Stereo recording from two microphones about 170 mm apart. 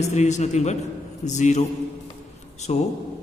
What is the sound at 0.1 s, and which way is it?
A man's voice, 40° left (ahead or behind).